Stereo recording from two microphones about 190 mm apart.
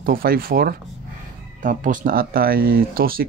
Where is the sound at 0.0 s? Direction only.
50° right (ahead or behind).